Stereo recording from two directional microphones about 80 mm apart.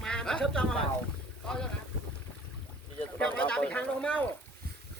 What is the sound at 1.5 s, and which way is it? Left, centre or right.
Speech, centre.